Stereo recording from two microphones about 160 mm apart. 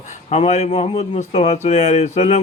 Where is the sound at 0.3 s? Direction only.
45° left (ahead or behind).